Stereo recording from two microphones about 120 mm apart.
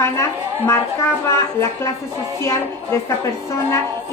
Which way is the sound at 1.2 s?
25° left (ahead or behind).